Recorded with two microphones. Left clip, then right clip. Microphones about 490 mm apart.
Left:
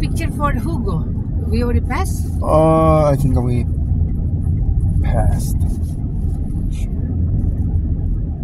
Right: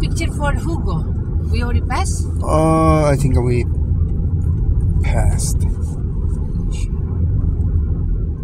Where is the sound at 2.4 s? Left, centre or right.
Left.